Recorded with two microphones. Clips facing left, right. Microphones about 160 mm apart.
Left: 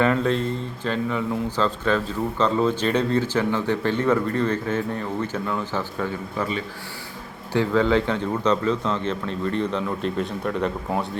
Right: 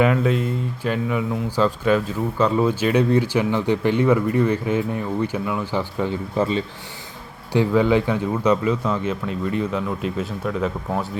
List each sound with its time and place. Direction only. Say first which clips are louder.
0.0 s speech: right 2 dB; 10° right (ahead or behind)
6.3 s speech: right 7 dB; 30° right (ahead or behind)
7.5 s speech: right 2 dB; 15° right (ahead or behind)